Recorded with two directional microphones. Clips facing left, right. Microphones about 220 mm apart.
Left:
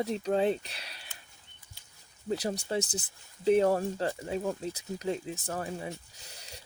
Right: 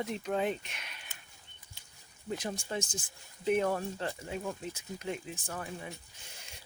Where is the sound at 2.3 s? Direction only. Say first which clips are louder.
Left 5 dB; 40° left (ahead or behind).